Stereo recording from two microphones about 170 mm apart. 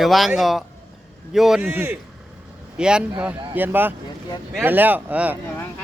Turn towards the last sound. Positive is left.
turn(degrees=-10)  # may be behind; listen again after turning